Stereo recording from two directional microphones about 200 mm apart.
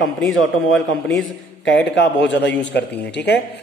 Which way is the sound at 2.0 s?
60° left (ahead or behind).